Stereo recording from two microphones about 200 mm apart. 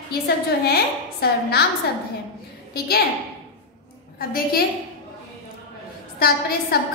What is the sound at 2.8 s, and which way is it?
Speech, 50° left (ahead or behind).